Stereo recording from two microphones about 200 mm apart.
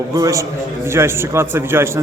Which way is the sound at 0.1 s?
15° right (ahead or behind).